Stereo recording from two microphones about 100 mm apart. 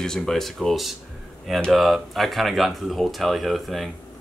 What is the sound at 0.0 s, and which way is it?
Speech, 5° left (ahead or behind).